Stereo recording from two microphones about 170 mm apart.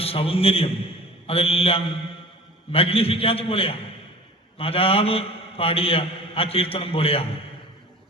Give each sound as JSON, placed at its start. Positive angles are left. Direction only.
{"t": 0.0, "sound": "a man's voice", "side_deg": 35}